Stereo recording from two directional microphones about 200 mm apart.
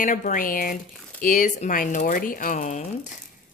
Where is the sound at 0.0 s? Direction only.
40° left (ahead or behind).